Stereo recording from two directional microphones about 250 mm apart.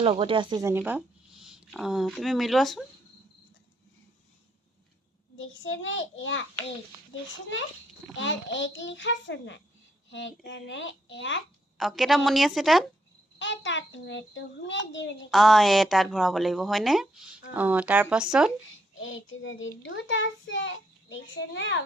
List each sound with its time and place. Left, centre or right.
0.0 s a woman's voice: right; by 2.8 s centre
5.4 s a child's voice: left
8.1 s a child's voice: left
11.8 s a woman's voice: centre
13.4 s a child's voice: left
15.3 s a woman's voice: centre
18.7 s a child's voice: left